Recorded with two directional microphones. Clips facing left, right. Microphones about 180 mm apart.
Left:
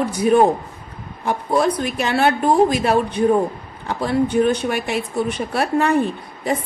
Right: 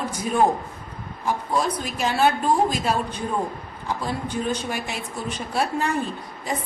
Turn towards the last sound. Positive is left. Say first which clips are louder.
# left 7 dB
turn(degrees=65)  # may be behind; listen again after turning